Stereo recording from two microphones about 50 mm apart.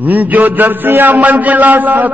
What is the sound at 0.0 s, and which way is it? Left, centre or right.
Mantra, right.